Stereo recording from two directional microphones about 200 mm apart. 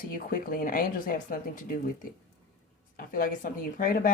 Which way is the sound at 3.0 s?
45° left (ahead or behind).